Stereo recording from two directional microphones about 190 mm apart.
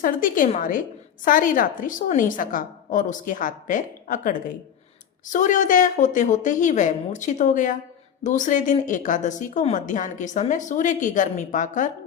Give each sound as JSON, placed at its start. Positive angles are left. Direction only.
{"t": 0.0, "sound": "a woman's voice", "side_deg": 45}